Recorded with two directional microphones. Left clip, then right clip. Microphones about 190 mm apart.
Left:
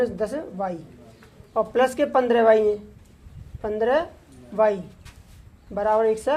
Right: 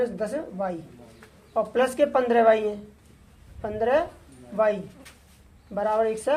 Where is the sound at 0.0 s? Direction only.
35° left (ahead or behind).